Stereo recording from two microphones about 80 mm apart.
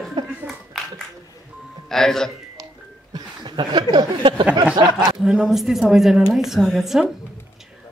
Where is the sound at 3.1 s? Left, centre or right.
Right.